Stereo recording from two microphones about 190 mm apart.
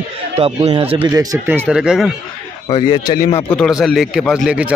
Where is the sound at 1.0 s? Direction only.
20° right (ahead or behind).